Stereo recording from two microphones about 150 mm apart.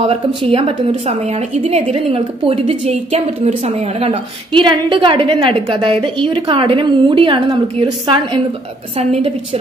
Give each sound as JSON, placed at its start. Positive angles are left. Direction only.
{"t": 0.0, "sound": "a woman's voice", "side_deg": -40}